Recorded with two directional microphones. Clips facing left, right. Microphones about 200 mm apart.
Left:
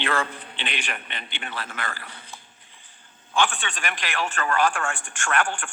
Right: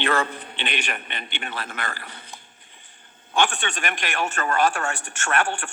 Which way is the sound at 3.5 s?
45° right (ahead or behind).